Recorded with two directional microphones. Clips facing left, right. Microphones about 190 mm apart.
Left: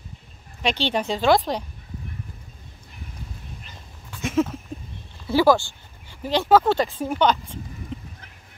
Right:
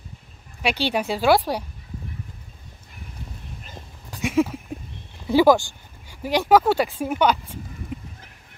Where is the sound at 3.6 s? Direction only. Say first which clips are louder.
Right 3 dB; 45° right (ahead or behind).